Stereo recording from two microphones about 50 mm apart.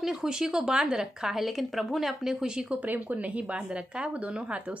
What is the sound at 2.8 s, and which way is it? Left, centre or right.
Speech, right.